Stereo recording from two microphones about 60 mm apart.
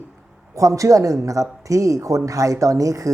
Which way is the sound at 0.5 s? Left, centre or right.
Right.